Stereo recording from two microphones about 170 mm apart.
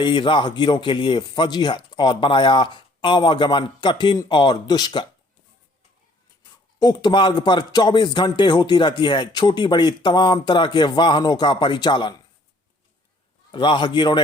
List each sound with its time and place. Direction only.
0.0 s a man's voice: 30° left (ahead or behind)
6.4 s a man's voice: 25° left (ahead or behind)
13.5 s a man's voice: 30° left (ahead or behind)